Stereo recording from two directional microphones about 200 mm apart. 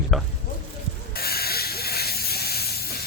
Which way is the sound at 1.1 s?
50° left (ahead or behind).